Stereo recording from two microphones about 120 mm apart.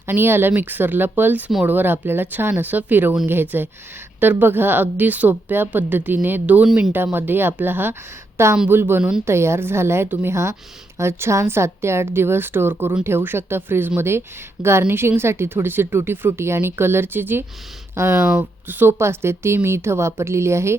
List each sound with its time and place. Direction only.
0.1 s a woman's voice: 20° right (ahead or behind)
6.7 s speech: centre (ahead or behind)
6.9 s a woman's voice: 20° right (ahead or behind)
9.2 s a woman's voice: 20° right (ahead or behind)